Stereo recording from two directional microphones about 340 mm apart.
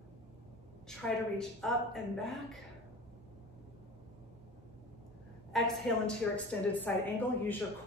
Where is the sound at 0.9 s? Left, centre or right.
Centre.